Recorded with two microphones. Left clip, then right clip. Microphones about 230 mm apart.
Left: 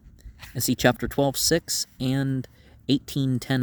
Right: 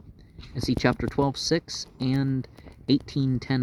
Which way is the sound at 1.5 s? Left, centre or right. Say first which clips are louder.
Left 3 dB; left.